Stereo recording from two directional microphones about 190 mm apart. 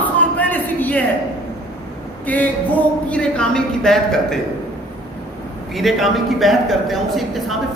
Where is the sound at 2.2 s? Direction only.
10° left (ahead or behind).